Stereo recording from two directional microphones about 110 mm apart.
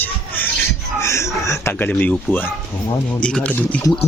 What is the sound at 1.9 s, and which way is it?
Speech, 15° left (ahead or behind).